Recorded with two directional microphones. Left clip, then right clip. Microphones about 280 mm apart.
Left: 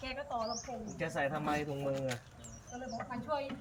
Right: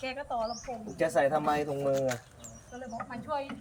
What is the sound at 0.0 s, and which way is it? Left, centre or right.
Speech, centre.